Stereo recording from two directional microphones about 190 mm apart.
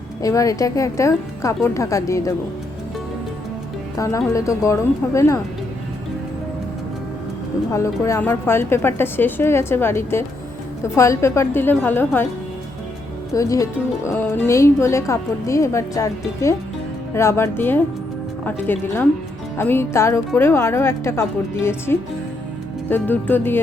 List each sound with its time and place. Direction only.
0.2 s speech: 15° left (ahead or behind)
3.9 s speech: 15° left (ahead or behind)
7.7 s speech: 15° left (ahead or behind)
13.3 s speech: 15° left (ahead or behind)